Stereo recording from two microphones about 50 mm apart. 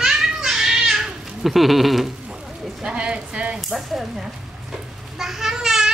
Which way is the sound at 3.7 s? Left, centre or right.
Centre.